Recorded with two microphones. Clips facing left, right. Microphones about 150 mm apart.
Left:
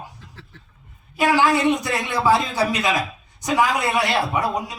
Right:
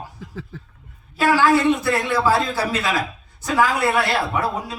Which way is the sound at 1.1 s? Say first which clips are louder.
Right 2 dB; 15° left (ahead or behind).